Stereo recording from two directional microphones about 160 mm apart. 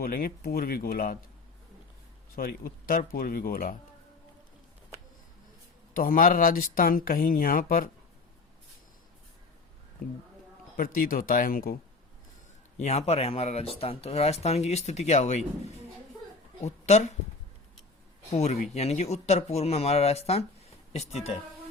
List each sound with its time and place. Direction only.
0.0 s speech: 65° left (ahead or behind)
2.3 s speech: 65° left (ahead or behind)
5.9 s speech: 60° left (ahead or behind)
10.8 s speech: 60° left (ahead or behind)
12.8 s speech: 40° left (ahead or behind)
16.6 s speech: 45° left (ahead or behind)
18.3 s speech: 45° left (ahead or behind)